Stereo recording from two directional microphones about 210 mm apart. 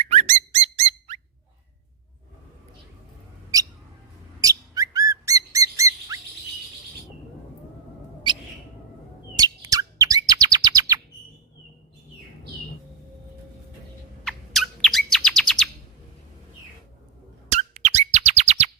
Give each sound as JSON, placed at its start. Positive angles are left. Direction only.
{"t": 0.1, "sound": "squeak", "side_deg": -30}
{"t": 4.4, "sound": "bird", "side_deg": -15}
{"t": 9.4, "sound": "chirp", "side_deg": -15}
{"t": 14.3, "sound": "bird", "side_deg": 0}
{"t": 17.5, "sound": "a sound", "side_deg": -35}